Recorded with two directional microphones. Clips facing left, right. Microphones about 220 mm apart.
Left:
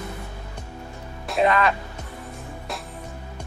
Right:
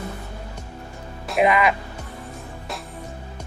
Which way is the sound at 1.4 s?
10° right (ahead or behind).